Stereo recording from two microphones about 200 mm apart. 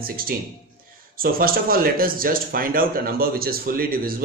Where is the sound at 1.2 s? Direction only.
45° right (ahead or behind).